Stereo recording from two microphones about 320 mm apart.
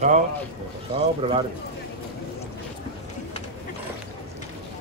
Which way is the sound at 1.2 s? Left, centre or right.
Centre.